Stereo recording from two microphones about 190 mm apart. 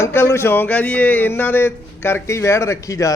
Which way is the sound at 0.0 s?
15° left (ahead or behind).